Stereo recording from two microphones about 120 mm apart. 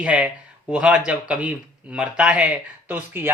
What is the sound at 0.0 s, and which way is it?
Speech, 10° right (ahead or behind).